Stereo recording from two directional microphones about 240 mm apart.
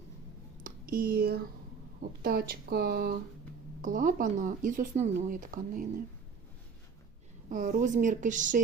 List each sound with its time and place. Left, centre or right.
0.6 s speech: right
7.5 s speech: right